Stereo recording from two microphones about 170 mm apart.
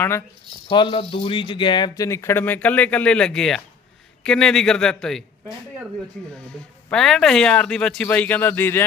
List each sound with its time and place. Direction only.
0.7 s a man's voice: 30° left (ahead or behind)